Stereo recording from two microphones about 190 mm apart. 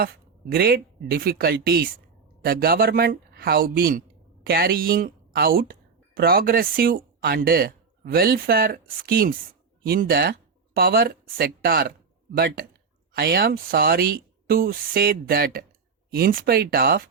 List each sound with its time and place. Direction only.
0.0 s speech: 50° right (ahead or behind)
13.1 s speech: 55° right (ahead or behind)